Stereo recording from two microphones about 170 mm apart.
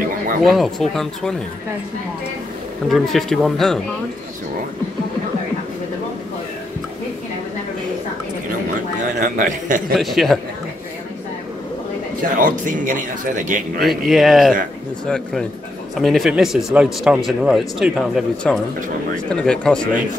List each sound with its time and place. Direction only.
0.4 s speech: centre (ahead or behind)
2.9 s speech: centre (ahead or behind)
9.2 s speech: 50° right (ahead or behind)
9.9 s speech: centre (ahead or behind)
12.4 s speech: 50° right (ahead or behind)
13.8 s speech: centre (ahead or behind)